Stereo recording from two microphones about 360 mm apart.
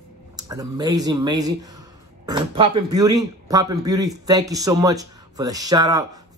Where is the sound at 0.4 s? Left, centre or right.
Centre.